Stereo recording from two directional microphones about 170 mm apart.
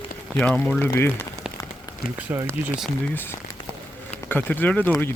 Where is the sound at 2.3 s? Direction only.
15° right (ahead or behind).